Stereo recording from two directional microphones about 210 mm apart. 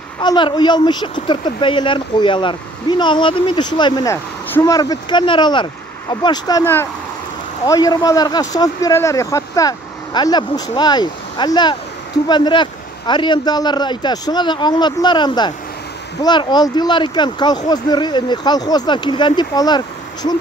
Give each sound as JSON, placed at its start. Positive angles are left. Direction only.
{"t": 0.2, "sound": "speech", "side_deg": 20}